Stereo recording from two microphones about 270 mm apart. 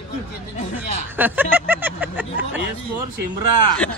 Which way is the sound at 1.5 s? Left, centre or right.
Centre.